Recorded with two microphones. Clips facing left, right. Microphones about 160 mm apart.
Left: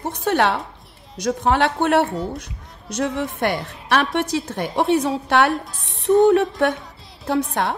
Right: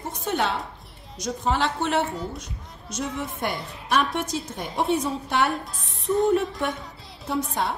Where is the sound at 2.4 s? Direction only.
70° left (ahead or behind).